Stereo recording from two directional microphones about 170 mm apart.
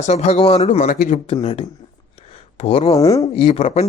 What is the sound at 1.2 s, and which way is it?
Speech, 35° left (ahead or behind).